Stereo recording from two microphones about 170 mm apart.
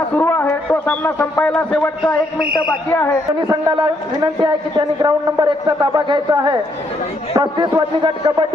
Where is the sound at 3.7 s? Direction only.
30° right (ahead or behind).